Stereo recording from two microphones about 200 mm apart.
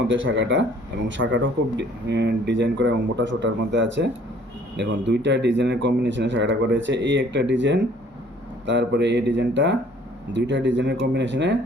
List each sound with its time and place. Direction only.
0.1 s speech: 70° right (ahead or behind)